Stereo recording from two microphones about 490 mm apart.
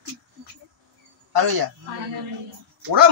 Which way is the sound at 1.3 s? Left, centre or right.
Right.